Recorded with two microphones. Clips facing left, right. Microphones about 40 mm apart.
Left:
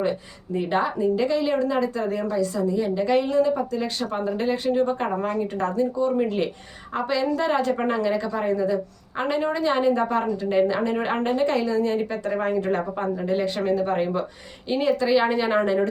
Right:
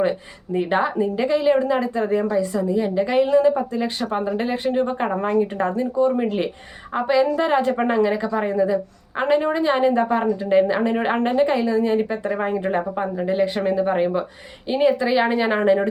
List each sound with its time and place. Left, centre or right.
0.5 s a woman's voice: right